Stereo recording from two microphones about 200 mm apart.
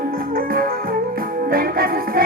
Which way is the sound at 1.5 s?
45° right (ahead or behind).